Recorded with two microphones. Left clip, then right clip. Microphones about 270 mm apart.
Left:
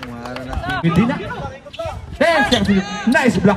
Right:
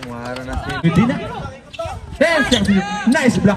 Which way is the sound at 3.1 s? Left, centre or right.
Centre.